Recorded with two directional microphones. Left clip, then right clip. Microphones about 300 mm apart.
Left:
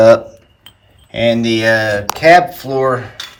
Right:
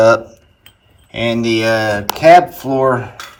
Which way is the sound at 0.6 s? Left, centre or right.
Centre.